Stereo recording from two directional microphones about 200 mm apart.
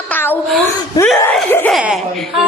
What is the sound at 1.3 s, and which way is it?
Speech, 5° left (ahead or behind).